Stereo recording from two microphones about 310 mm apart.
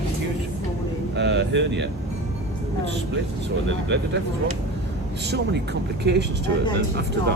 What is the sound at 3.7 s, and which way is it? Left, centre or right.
Speech, right.